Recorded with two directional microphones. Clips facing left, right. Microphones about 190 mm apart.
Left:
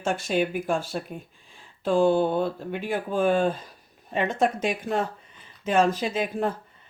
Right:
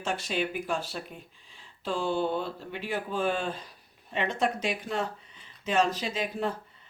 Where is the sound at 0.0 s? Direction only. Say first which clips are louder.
Left 6 dB; 50° left (ahead or behind).